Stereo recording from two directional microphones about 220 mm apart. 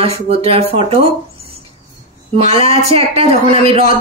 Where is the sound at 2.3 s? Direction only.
30° right (ahead or behind).